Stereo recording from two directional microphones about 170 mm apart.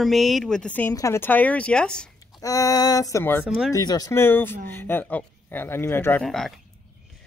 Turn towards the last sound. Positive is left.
turn(degrees=0)  # may be behind; listen again after turning